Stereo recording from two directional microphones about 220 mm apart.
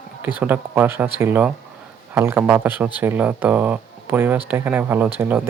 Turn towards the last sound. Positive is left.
turn(degrees=-10)  # may be behind; listen again after turning